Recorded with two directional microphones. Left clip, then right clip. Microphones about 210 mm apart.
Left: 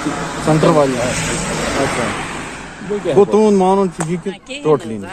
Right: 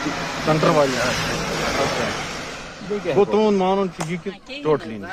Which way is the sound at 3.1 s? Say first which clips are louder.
Left 6 dB; 45° left (ahead or behind).